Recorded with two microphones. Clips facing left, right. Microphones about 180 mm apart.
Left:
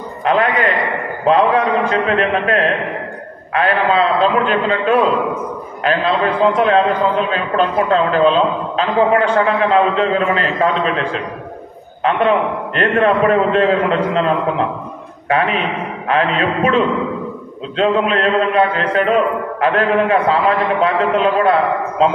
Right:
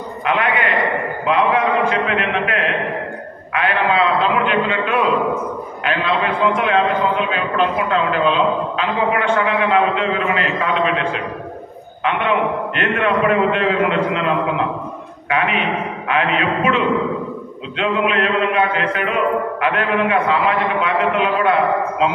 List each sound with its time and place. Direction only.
0.2 s a man's voice: 35° left (ahead or behind)
6.6 s a man's voice: 40° left (ahead or behind)